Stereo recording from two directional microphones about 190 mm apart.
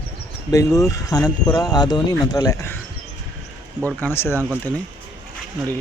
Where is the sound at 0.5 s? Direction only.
15° left (ahead or behind).